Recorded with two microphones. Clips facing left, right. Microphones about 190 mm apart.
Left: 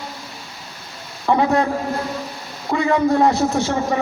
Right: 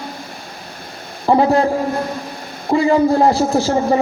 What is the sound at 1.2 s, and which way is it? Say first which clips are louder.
Speech: right 3 dB; 30° right (ahead or behind).